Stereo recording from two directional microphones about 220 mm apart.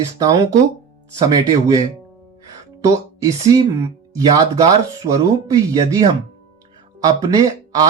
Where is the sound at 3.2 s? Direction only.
15° right (ahead or behind).